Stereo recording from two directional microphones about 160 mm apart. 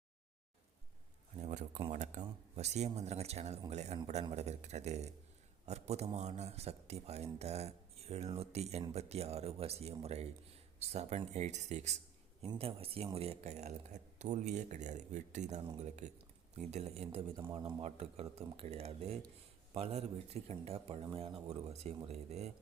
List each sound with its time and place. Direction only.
1.4 s a sound: 50° right (ahead or behind)
1.9 s speech: 50° right (ahead or behind)
17.5 s a man's voice: 30° right (ahead or behind)
17.8 s speech: 40° right (ahead or behind)